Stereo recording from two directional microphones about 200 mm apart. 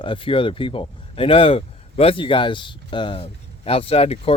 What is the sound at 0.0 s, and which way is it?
Speech, 25° left (ahead or behind).